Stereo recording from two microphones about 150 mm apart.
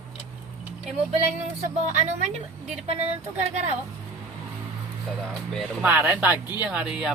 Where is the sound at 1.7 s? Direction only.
50° right (ahead or behind).